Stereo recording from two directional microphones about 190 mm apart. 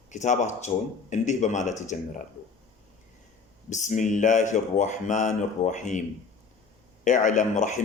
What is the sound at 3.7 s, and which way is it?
A man's voice, 40° left (ahead or behind).